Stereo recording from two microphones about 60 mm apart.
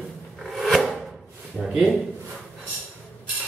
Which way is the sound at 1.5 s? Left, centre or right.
Centre.